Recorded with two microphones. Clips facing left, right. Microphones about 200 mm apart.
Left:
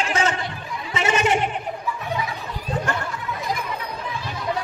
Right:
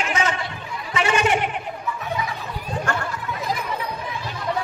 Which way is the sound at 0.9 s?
25° left (ahead or behind).